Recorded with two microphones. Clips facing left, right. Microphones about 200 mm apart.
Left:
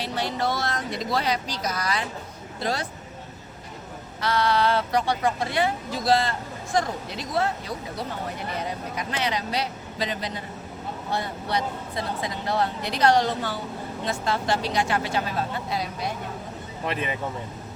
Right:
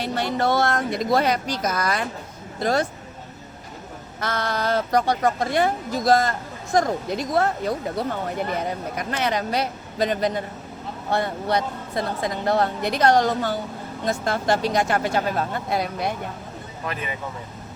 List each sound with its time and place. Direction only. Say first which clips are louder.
0.0 s speech: right 4 dB; 55° right (ahead or behind)
4.2 s speech: left 3 dB; 45° right (ahead or behind)
16.8 s speech: left 2 dB; 25° left (ahead or behind)